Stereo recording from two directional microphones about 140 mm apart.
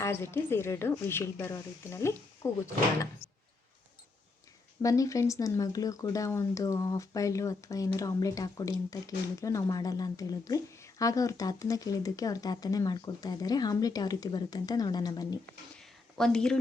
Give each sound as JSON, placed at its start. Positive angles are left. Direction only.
{"t": 0.0, "sound": "speech", "side_deg": 15}
{"t": 4.8, "sound": "speech", "side_deg": 25}
{"t": 15.7, "sound": "a sound", "side_deg": 5}